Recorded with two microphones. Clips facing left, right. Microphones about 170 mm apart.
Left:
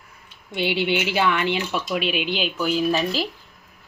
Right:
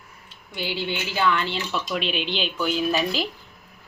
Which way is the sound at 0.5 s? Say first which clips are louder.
Left 6 dB; 20° left (ahead or behind).